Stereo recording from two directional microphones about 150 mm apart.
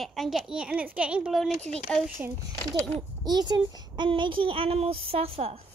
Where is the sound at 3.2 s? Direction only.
25° right (ahead or behind).